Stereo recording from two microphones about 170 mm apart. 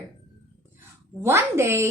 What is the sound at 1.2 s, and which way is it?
Speech, 15° right (ahead or behind).